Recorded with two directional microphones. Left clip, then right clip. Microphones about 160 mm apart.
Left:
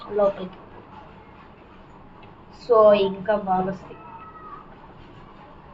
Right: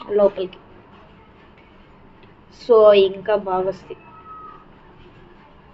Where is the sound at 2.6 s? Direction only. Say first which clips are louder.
Right 4 dB; 75° right (ahead or behind).